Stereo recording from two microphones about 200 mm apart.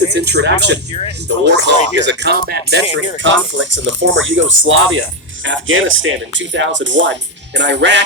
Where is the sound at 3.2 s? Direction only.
70° right (ahead or behind).